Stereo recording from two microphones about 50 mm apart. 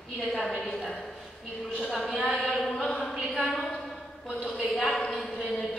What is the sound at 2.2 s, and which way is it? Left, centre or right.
Chant, centre.